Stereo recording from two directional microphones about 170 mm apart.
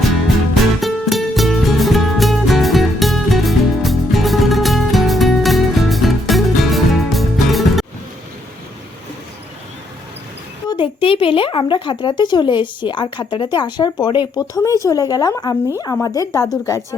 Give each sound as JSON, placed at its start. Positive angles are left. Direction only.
{"t": 0.8, "sound": "music", "side_deg": 0}
{"t": 10.7, "sound": "speech", "side_deg": 30}